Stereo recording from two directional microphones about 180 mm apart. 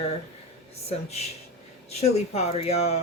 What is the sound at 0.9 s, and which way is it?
Speech, 35° left (ahead or behind).